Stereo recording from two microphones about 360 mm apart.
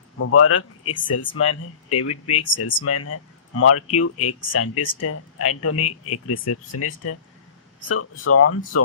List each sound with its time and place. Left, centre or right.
0.2 s speech: left